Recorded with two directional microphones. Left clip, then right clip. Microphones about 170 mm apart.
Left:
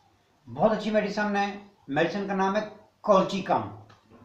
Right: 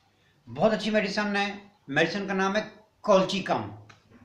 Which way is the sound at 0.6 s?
15° right (ahead or behind).